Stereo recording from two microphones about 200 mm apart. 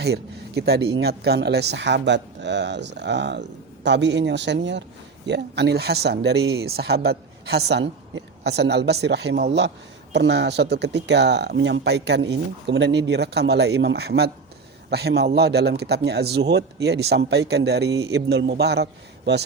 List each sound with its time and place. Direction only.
0.0 s speech: 55° right (ahead or behind)